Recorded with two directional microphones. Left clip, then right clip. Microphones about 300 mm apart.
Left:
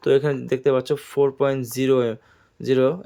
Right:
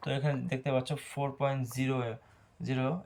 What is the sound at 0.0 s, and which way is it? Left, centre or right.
Speech, centre.